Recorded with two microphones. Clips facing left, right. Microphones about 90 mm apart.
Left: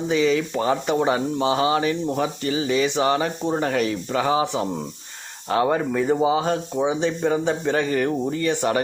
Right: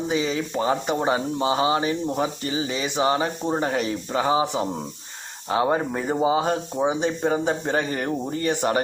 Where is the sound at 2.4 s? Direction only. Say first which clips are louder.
Left 5 dB; 25° right (ahead or behind).